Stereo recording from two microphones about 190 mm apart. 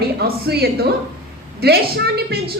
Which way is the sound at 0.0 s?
55° right (ahead or behind).